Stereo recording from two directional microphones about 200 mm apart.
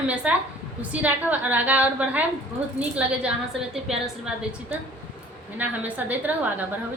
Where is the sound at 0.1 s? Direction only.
5° right (ahead or behind).